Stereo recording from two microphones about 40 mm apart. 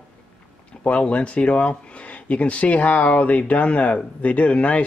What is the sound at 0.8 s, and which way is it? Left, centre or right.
Speech, left.